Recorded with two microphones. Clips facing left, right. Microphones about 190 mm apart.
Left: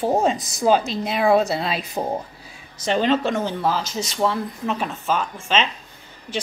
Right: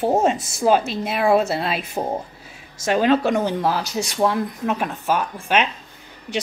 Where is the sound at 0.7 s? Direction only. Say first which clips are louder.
Even; 5° right (ahead or behind).